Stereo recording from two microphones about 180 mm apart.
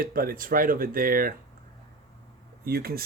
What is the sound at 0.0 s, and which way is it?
Speech, 55° right (ahead or behind).